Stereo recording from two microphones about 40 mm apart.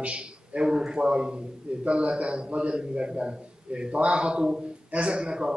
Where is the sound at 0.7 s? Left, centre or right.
Centre.